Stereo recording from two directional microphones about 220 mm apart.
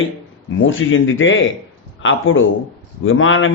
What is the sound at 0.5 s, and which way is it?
Speech, 60° left (ahead or behind).